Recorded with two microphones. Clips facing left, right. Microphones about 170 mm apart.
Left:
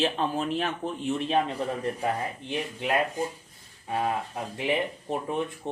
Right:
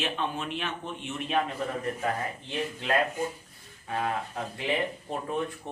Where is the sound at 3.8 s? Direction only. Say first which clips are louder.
Left 2 dB; 15° left (ahead or behind).